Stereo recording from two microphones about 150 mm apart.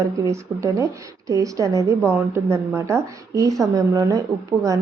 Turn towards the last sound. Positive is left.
turn(degrees=-20)  # may be behind; listen again after turning